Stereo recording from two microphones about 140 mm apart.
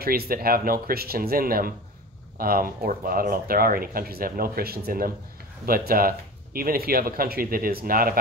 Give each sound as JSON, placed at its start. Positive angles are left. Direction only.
{"t": 0.0, "sound": "speech", "side_deg": -90}